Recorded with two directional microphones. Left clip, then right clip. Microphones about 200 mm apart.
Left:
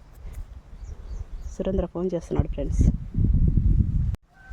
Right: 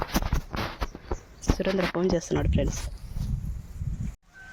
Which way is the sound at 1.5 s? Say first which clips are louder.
Even; 20° left (ahead or behind).